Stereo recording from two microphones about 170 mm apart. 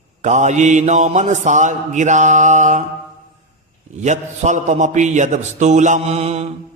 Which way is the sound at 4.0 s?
45° right (ahead or behind).